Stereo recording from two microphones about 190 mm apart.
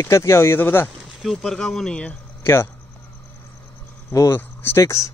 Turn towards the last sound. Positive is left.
turn(degrees=15)  # may be behind; listen again after turning